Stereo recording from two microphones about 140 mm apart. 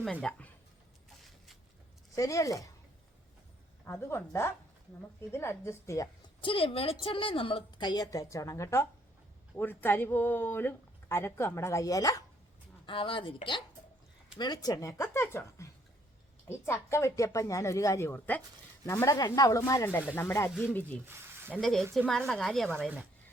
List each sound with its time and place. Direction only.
0.0 s speech: 5° left (ahead or behind)
2.1 s speech: 25° left (ahead or behind)
3.8 s speech: 15° left (ahead or behind)
6.4 s a woman's voice: 40° left (ahead or behind)
12.8 s a woman's voice: 35° left (ahead or behind); by 20.5 s 20° left (ahead or behind)
20.5 s speech: 5° right (ahead or behind)
21.1 s speech: 15° right (ahead or behind)
21.6 s a woman's voice: centre (ahead or behind)